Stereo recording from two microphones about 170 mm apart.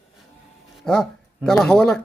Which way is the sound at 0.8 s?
5° left (ahead or behind).